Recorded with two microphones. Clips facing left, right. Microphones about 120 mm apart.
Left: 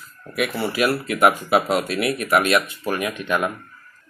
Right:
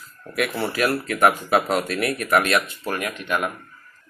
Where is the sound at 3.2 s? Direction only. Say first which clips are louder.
Left 2 dB; 25° left (ahead or behind).